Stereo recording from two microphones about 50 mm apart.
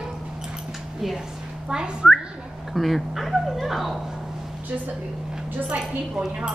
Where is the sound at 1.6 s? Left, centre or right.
Centre.